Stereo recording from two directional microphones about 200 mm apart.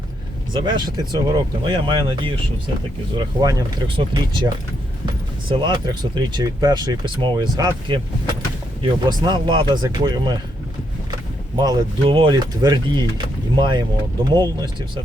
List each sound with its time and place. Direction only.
0.5 s speech: 20° right (ahead or behind)
5.5 s speech: 25° right (ahead or behind)
11.5 s speech: 20° right (ahead or behind)